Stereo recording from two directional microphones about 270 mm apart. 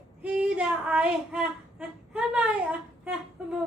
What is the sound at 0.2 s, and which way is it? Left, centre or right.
Child singing, centre.